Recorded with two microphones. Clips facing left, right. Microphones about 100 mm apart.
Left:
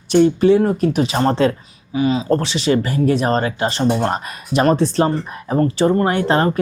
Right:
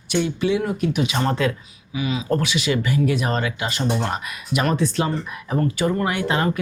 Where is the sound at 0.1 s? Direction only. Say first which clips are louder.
Left 9 dB; 40° left (ahead or behind).